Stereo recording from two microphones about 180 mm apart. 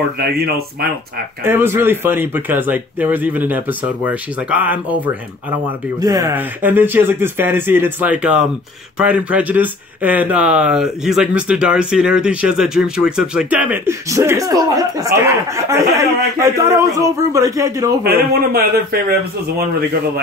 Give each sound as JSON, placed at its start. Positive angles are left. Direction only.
{"t": 0.2, "sound": "a man's voice", "side_deg": -60}
{"t": 1.4, "sound": "speech", "side_deg": -15}
{"t": 5.9, "sound": "speech", "side_deg": -20}
{"t": 18.0, "sound": "a man's voice", "side_deg": -60}